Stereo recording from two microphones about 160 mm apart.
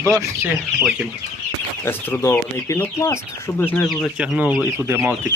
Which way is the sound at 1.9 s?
15° left (ahead or behind).